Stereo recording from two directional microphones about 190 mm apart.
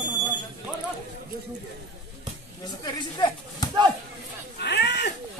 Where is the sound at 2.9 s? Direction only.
20° left (ahead or behind).